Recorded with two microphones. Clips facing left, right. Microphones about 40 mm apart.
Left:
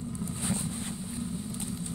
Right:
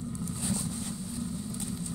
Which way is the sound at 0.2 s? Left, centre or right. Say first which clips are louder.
Left 1 dB; left.